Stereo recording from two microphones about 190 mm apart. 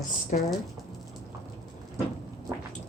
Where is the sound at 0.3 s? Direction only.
40° left (ahead or behind).